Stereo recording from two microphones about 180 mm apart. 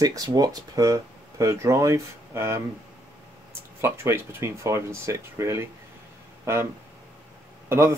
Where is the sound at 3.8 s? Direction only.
15° right (ahead or behind).